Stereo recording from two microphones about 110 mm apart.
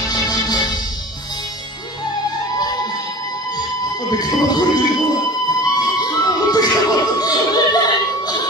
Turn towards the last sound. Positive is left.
turn(degrees=35)  # may be behind; listen again after turning